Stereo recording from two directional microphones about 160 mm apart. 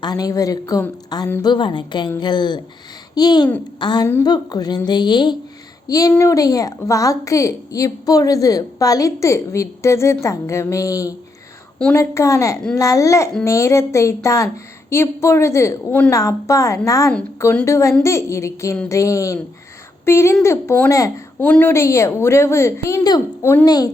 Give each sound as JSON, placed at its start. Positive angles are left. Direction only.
{"t": 0.0, "sound": "a woman's voice", "side_deg": 25}